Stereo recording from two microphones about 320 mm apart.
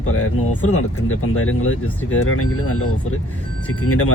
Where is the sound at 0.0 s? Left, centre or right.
Left.